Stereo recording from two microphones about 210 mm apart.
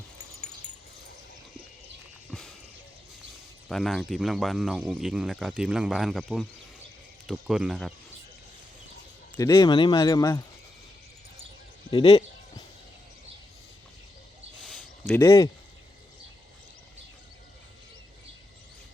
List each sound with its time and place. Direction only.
2.3 s a sound: centre (ahead or behind)
3.7 s speech: centre (ahead or behind)
9.5 s speech: 20° left (ahead or behind)
11.9 s speech: 25° left (ahead or behind)
14.7 s a sound: centre (ahead or behind)
15.2 s speech: 15° left (ahead or behind)